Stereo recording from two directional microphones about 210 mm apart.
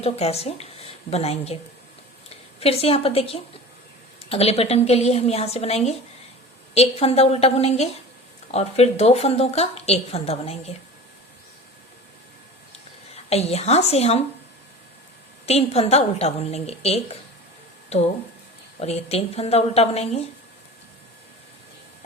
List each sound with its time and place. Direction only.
0.0 s a woman's voice: 30° left (ahead or behind)
13.3 s a woman's voice: 30° left (ahead or behind)
15.4 s a woman's voice: 30° left (ahead or behind)